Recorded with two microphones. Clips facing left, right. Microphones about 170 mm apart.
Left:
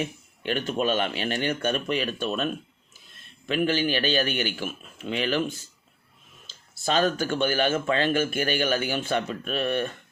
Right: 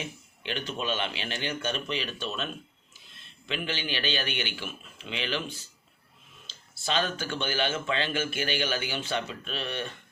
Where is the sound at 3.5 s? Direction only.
45° left (ahead or behind).